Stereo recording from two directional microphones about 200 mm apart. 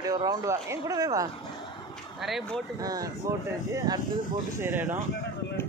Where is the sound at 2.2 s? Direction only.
Centre (ahead or behind).